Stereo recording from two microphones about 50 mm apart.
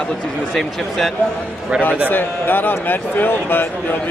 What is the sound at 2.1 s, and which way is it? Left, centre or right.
A man's voice, left.